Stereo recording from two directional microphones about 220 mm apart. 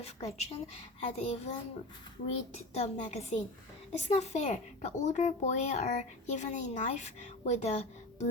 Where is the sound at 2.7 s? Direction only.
30° left (ahead or behind).